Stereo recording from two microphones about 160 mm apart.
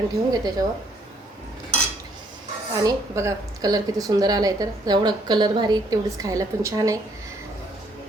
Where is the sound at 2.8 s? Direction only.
20° right (ahead or behind).